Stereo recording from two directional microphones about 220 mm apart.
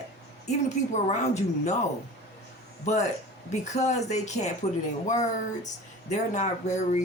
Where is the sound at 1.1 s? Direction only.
30° left (ahead or behind).